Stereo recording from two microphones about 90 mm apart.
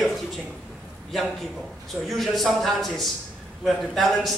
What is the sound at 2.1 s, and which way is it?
A man's voice, centre (ahead or behind).